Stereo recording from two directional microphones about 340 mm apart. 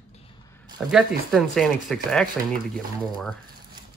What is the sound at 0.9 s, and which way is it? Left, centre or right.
Speech, centre.